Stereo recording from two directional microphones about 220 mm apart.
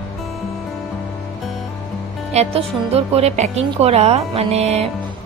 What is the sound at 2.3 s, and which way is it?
A woman's voice, 30° right (ahead or behind).